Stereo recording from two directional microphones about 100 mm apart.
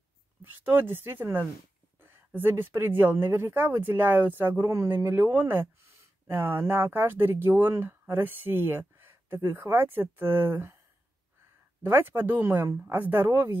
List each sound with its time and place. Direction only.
0.4 s speech: 20° right (ahead or behind)
11.8 s speech: 20° right (ahead or behind)